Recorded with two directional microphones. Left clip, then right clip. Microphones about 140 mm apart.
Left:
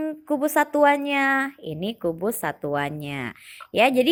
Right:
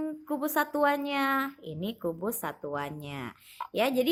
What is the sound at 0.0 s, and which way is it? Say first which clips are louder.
A woman's voice: left 8 dB; 15° left (ahead or behind).